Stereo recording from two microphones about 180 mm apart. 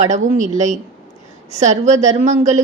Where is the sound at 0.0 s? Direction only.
40° right (ahead or behind).